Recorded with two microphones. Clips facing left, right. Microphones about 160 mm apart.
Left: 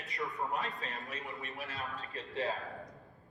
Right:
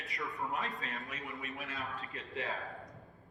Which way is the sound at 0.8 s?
35° left (ahead or behind).